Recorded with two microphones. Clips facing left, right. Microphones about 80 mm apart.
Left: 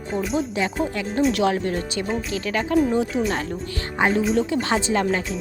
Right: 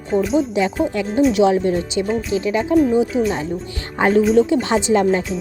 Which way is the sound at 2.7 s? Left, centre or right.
Centre.